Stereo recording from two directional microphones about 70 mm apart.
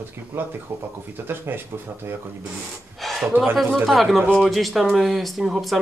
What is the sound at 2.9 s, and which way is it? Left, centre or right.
Speech, centre.